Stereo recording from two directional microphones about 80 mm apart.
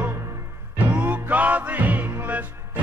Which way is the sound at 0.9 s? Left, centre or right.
Centre.